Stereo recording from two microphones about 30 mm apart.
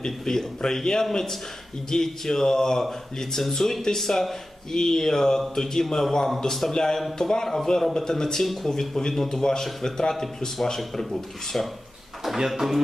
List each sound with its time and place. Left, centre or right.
0.0 s a man's voice: centre
7.4 s a man's voice: centre
7.9 s a man's voice: centre
12.5 s speech: centre